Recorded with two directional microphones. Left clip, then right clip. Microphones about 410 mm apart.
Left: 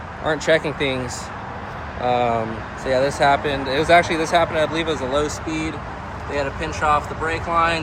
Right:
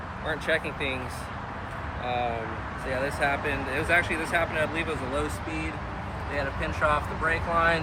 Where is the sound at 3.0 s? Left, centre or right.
Centre.